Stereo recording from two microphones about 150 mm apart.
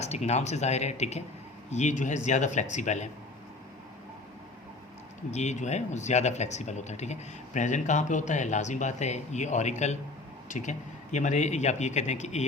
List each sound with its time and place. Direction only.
0.0 s speech: 45° left (ahead or behind)
5.3 s speech: 50° left (ahead or behind)